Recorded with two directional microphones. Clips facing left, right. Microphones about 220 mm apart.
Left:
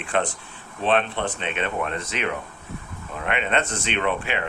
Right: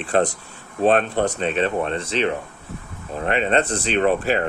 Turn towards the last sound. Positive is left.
turn(degrees=-40)  # may be behind; listen again after turning